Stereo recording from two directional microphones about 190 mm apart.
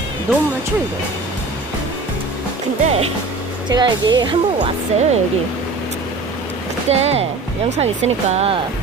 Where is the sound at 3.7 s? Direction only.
20° right (ahead or behind).